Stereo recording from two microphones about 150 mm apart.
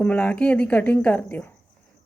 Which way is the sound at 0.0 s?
10° left (ahead or behind).